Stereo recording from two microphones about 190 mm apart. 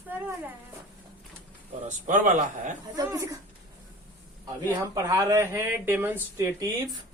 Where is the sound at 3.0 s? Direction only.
15° right (ahead or behind).